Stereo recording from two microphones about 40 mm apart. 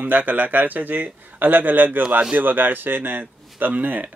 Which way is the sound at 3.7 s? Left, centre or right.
Right.